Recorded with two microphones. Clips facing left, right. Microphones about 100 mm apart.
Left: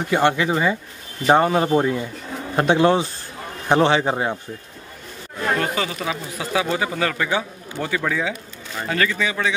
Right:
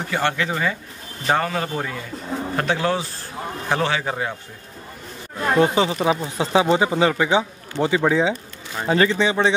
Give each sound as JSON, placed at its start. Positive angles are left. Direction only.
{"t": 0.1, "sound": "speech", "side_deg": 20}
{"t": 5.6, "sound": "speech", "side_deg": -25}